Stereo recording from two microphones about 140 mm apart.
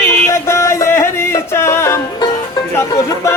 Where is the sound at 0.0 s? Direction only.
20° left (ahead or behind).